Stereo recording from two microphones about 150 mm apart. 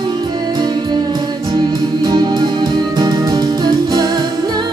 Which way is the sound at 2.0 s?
25° right (ahead or behind).